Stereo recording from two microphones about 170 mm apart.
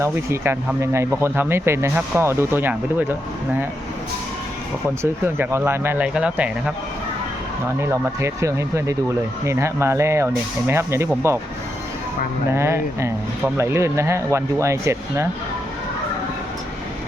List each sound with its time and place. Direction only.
0.0 s speech: 15° right (ahead or behind)
5.2 s speech: 15° right (ahead or behind)
7.8 s speech: 15° right (ahead or behind)
12.5 s speech: 15° right (ahead or behind)